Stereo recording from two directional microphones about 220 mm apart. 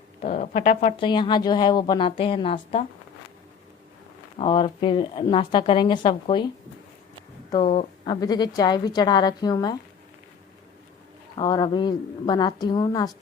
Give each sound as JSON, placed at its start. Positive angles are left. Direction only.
{"t": 0.2, "sound": "speech", "side_deg": 35}
{"t": 4.4, "sound": "speech", "side_deg": 25}
{"t": 7.5, "sound": "speech", "side_deg": 25}
{"t": 11.3, "sound": "speech", "side_deg": 20}